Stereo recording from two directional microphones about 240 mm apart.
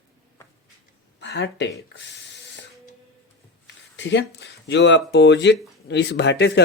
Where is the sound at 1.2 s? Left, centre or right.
Left.